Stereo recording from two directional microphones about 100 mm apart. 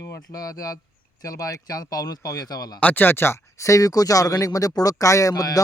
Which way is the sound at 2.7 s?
20° left (ahead or behind).